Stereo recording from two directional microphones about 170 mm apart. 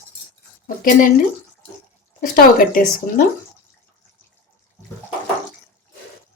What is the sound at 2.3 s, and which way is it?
Speech, 55° left (ahead or behind).